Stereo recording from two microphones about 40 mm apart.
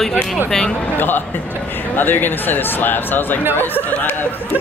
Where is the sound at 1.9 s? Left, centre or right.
Left.